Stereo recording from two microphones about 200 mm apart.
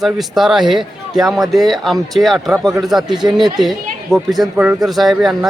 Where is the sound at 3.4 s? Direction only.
20° right (ahead or behind).